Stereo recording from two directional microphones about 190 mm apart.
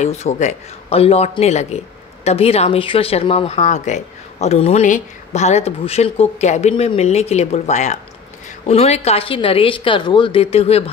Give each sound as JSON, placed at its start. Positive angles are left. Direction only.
{"t": 0.0, "sound": "a woman's voice", "side_deg": 35}